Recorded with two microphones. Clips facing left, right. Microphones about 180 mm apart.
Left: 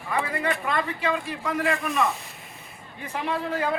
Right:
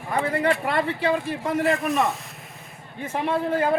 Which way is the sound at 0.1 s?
35° right (ahead or behind).